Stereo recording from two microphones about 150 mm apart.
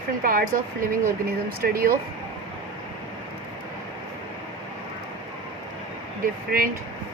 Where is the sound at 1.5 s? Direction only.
75° right (ahead or behind).